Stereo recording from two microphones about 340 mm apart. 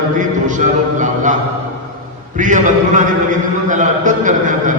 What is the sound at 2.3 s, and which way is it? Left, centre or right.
A man's voice, right.